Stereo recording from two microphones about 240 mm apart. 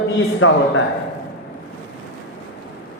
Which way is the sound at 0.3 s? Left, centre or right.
Left.